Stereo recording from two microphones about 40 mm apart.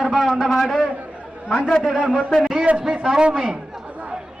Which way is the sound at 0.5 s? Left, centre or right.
Centre.